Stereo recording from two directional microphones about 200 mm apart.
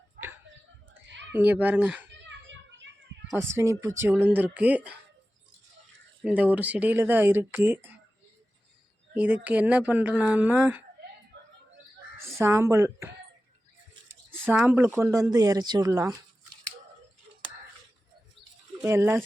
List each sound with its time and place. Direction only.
1.0 s a sound: 65° right (ahead or behind)
1.3 s speech: 10° right (ahead or behind)
2.0 s a sound: 65° right (ahead or behind)
3.5 s speech: 15° right (ahead or behind)
6.2 s speech: 5° right (ahead or behind)
9.1 s speech: 5° right (ahead or behind)
12.1 s speech: 15° right (ahead or behind)
14.4 s speech: 5° right (ahead or behind)
18.8 s speech: 15° right (ahead or behind)